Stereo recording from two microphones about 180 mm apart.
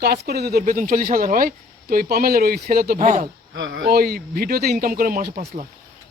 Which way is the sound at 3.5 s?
90° right.